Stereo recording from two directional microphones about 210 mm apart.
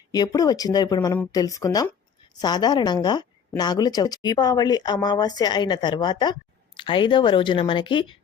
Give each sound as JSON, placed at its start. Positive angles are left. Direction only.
{"t": 0.1, "sound": "a woman's voice", "side_deg": 20}